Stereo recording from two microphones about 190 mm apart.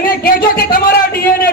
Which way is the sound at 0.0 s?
50° left (ahead or behind).